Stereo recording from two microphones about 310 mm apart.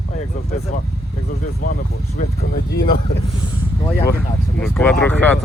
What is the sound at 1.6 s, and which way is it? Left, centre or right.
Speech, left.